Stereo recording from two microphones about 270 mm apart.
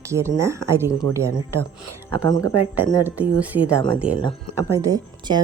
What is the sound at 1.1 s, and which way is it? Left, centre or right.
Speech, right.